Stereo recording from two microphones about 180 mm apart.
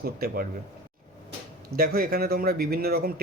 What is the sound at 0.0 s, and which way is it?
Speech, 55° right (ahead or behind).